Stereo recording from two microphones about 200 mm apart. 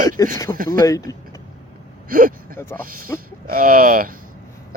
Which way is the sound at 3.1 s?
15° left (ahead or behind).